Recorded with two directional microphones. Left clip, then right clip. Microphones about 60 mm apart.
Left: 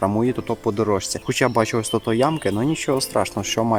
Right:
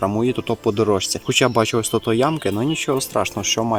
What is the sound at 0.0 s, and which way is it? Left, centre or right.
Speech, centre.